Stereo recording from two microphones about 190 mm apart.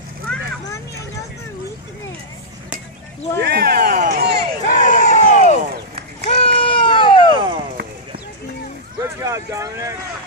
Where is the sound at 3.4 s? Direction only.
55° right (ahead or behind).